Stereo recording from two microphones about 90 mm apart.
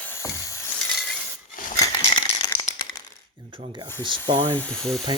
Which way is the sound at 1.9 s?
55° left (ahead or behind).